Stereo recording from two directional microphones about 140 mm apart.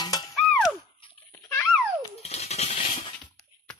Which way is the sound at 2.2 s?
50° left (ahead or behind).